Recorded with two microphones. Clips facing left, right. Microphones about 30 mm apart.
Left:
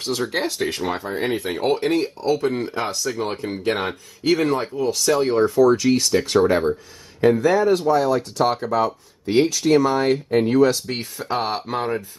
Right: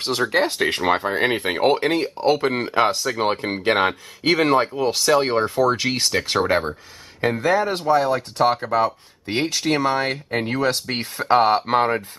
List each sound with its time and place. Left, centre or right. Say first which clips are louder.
0.3 s speech: right 4 dB; right
9.9 s speech: left 4 dB; right